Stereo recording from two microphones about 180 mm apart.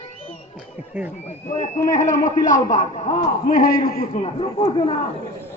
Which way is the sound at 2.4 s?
45° left (ahead or behind).